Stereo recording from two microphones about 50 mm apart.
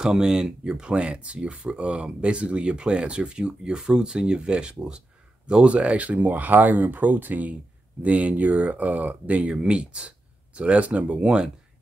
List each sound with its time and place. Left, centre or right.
0.0 s speech: centre